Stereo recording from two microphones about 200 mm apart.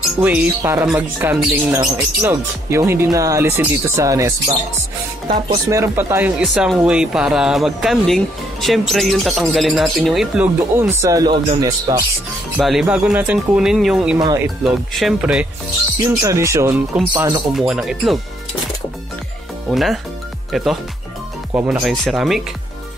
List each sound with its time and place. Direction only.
0.2 s speech: 5° right (ahead or behind)
12.5 s speech: 5° right (ahead or behind)
14.1 s speech: 15° right (ahead or behind)
14.6 s speech: centre (ahead or behind)
16.0 s speech: 15° right (ahead or behind)
17.6 s speech: centre (ahead or behind)
19.7 s speech: centre (ahead or behind)